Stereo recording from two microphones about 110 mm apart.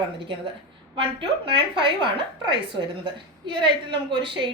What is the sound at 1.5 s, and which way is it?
A woman's voice, 50° right (ahead or behind).